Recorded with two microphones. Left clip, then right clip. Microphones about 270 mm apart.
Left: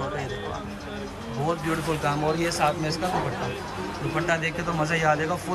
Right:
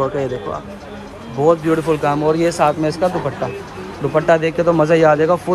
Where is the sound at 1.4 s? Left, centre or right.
Centre.